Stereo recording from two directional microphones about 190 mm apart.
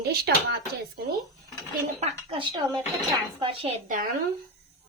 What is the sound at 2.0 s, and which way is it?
A woman's voice, 30° right (ahead or behind).